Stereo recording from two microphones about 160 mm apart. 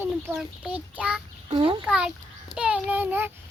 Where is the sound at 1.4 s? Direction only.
35° right (ahead or behind).